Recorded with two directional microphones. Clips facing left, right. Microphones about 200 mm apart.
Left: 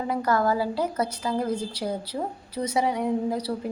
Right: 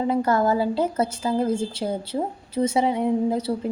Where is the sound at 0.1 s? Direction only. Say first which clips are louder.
Right 1 dB; 25° right (ahead or behind).